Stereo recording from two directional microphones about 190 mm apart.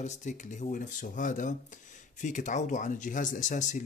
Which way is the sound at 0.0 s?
40° left (ahead or behind).